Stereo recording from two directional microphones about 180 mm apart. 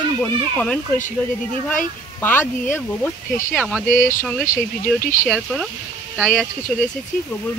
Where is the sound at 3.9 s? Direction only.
50° left (ahead or behind).